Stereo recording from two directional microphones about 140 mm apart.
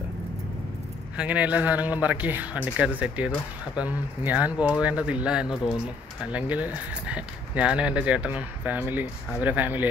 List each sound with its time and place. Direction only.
1.1 s speech: 10° right (ahead or behind)